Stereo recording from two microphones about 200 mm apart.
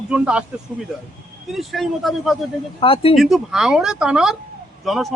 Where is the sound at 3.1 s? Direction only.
Centre (ahead or behind).